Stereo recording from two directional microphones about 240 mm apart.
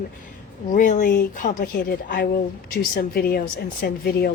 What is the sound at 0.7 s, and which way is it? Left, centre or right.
A woman's voice, left.